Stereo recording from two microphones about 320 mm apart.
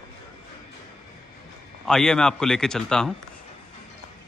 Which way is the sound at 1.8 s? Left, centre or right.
Centre.